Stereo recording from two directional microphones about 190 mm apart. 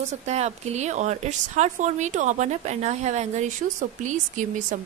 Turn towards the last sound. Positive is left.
turn(degrees=-40)  # may be behind; listen again after turning